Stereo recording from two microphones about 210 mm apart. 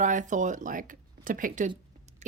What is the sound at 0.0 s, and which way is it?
A woman's voice, 35° right (ahead or behind).